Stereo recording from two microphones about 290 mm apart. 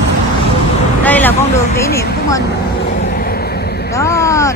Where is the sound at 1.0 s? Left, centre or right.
Centre.